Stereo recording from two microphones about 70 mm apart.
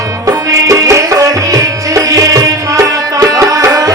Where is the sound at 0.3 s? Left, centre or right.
Right.